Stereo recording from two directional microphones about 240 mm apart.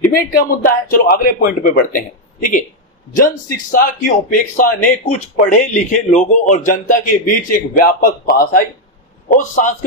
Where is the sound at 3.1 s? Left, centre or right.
Left.